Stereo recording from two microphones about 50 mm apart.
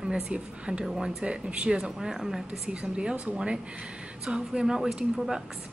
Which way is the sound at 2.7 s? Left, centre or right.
Centre.